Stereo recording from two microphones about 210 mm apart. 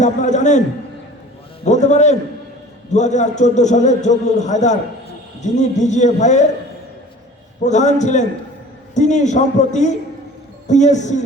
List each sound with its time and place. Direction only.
0.0 s a man's voice: 35° left (ahead or behind)
1.6 s a man's voice: 35° left (ahead or behind)
7.6 s a man's voice: 35° left (ahead or behind)